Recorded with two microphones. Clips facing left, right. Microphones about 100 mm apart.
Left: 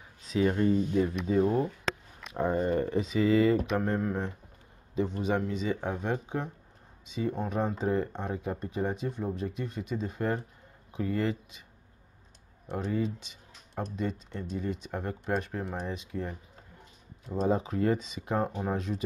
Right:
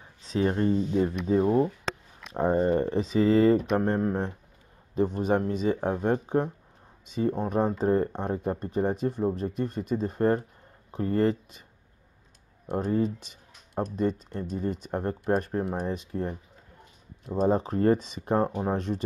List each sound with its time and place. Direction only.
0.2 s speech: 30° right (ahead or behind)
2.3 s speech: 30° right (ahead or behind)
4.9 s speech: 45° right (ahead or behind)
12.7 s speech: 45° right (ahead or behind)
17.4 s speech: 40° right (ahead or behind)